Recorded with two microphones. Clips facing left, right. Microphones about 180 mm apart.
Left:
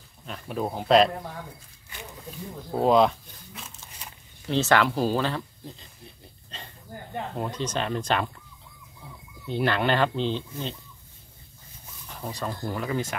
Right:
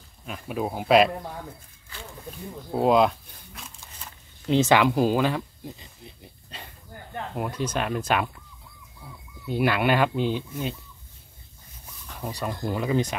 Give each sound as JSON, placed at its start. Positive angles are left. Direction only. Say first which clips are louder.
{"t": 0.3, "sound": "speech", "louder": "right 1 dB", "side_deg": -5}
{"t": 2.7, "sound": "speech", "louder": "even", "side_deg": -5}
{"t": 4.5, "sound": "speech", "louder": "right 3 dB", "side_deg": -15}
{"t": 9.5, "sound": "speech", "louder": "right 2 dB", "side_deg": -10}
{"t": 12.2, "sound": "speech", "louder": "right 2 dB", "side_deg": -10}